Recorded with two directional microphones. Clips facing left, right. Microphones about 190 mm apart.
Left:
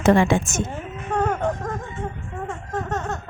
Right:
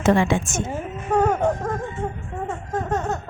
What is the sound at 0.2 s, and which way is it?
Speech, 45° left (ahead or behind).